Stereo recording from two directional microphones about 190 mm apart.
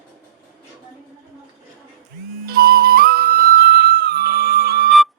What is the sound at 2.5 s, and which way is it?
Flute, 55° right (ahead or behind).